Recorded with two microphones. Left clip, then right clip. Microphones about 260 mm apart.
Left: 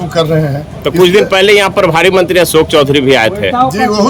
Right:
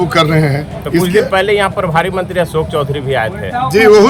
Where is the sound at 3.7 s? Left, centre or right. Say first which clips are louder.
Right 5 dB; centre.